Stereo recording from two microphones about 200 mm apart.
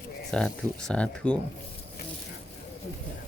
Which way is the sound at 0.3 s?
5° left (ahead or behind).